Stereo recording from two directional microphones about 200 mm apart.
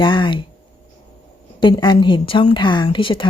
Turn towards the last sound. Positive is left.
turn(degrees=25)  # may be behind; listen again after turning